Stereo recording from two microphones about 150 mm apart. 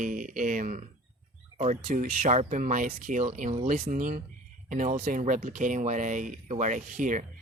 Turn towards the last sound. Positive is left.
turn(degrees=-60)  # may be behind; listen again after turning